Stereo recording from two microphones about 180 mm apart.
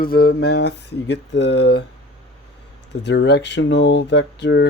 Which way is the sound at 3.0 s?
75° left (ahead or behind).